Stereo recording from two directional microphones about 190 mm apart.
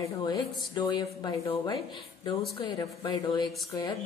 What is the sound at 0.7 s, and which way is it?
Speech, 20° left (ahead or behind).